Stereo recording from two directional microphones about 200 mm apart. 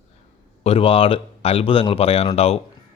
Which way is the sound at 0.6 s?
30° left (ahead or behind).